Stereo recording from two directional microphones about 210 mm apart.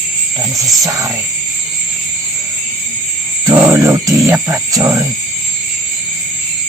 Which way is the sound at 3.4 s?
10° right (ahead or behind).